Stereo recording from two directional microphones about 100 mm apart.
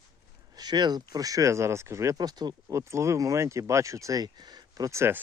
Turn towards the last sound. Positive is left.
turn(degrees=-25)  # may be behind; listen again after turning